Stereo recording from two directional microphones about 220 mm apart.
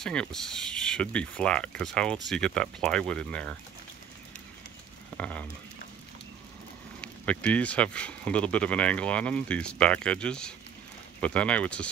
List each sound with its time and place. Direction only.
0.0 s speech: 5° left (ahead or behind)
5.1 s speech: 5° left (ahead or behind)
7.0 s speech: 5° left (ahead or behind)